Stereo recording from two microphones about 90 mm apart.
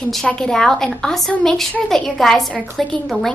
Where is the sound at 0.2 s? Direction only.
10° left (ahead or behind).